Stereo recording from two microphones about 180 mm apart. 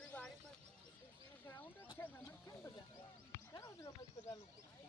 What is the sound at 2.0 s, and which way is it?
Speech, 15° left (ahead or behind).